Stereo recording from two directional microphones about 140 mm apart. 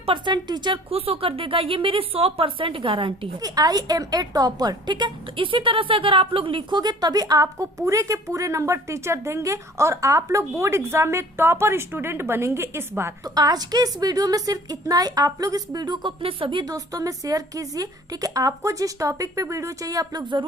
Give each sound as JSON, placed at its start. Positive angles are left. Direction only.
{"t": 0.0, "sound": "speech", "side_deg": -35}